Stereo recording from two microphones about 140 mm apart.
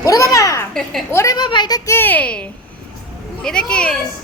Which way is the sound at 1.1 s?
25° left (ahead or behind).